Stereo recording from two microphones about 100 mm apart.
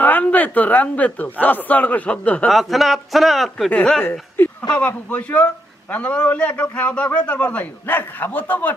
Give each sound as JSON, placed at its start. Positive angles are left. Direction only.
{"t": 0.0, "sound": "a man's voice", "side_deg": 15}
{"t": 2.5, "sound": "speech", "side_deg": 0}
{"t": 4.0, "sound": "a man's voice", "side_deg": 20}